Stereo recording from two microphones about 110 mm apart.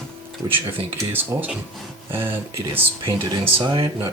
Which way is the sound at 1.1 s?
15° right (ahead or behind).